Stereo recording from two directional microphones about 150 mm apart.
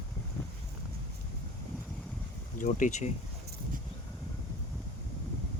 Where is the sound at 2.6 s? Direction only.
60° left (ahead or behind).